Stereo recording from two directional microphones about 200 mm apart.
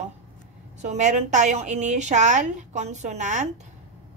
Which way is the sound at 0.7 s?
35° right (ahead or behind).